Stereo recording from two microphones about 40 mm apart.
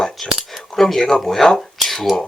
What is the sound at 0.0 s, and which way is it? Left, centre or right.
Cutlery, centre.